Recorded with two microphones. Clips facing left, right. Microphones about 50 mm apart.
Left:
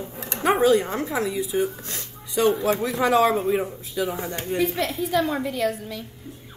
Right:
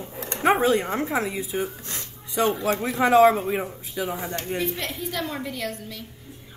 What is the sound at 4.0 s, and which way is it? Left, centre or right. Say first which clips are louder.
Speech: left 2 dB; centre.